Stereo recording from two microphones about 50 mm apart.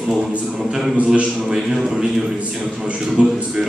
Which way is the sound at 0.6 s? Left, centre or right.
Centre.